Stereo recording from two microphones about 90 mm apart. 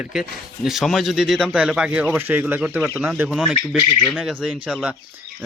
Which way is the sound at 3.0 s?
25° right (ahead or behind).